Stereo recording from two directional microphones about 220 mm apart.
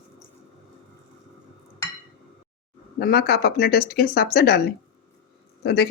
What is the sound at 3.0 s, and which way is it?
Speech, 45° left (ahead or behind).